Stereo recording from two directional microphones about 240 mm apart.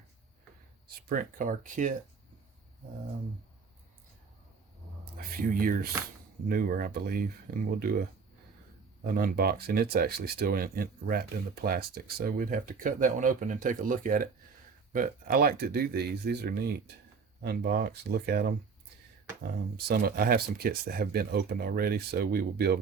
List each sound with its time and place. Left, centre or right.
0.9 s speech: right
5.1 s speech: right
9.0 s speech: right